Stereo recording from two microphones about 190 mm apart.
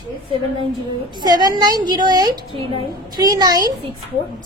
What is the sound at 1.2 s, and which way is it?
A woman's voice, 20° right (ahead or behind).